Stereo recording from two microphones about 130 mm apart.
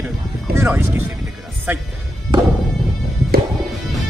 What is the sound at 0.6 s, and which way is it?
Speech, 20° right (ahead or behind).